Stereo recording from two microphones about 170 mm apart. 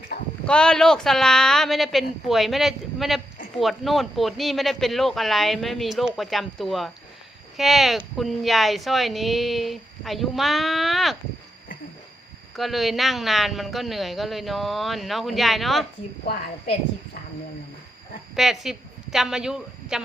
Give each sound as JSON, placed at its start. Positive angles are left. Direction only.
{"t": 0.1, "sound": "a sound", "side_deg": 65}
{"t": 0.4, "sound": "speech", "side_deg": 5}
{"t": 12.5, "sound": "speech", "side_deg": 0}
{"t": 18.3, "sound": "a woman's voice", "side_deg": 0}